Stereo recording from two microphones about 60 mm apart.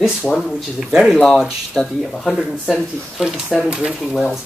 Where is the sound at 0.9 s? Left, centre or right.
Centre.